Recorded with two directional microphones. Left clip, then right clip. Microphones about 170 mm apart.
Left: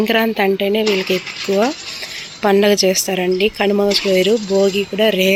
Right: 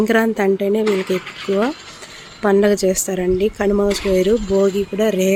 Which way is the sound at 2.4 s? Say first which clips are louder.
Left 2 dB; 10° right (ahead or behind).